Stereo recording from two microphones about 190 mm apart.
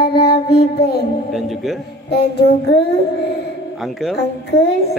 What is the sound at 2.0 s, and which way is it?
Child singing, 60° left (ahead or behind).